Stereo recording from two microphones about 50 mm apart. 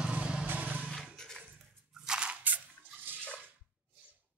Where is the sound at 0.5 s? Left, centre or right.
Right.